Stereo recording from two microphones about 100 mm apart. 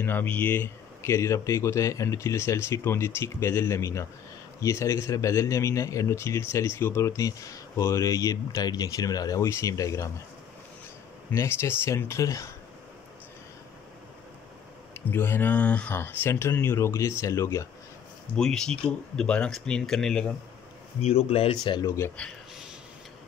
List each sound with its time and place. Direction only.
0.0 s speech: 20° left (ahead or behind)
11.3 s speech: 25° left (ahead or behind)
15.0 s speech: 20° left (ahead or behind)
18.3 s speech: 5° left (ahead or behind)
21.0 s speech: 90° left
21.8 s speech: 25° left (ahead or behind)